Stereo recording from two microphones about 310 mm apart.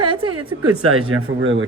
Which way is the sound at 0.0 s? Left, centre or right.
Centre.